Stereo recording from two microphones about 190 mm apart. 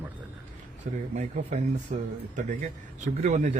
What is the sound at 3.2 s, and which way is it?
Speech, 40° right (ahead or behind).